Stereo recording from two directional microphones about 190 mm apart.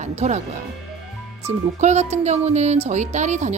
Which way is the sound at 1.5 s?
35° right (ahead or behind).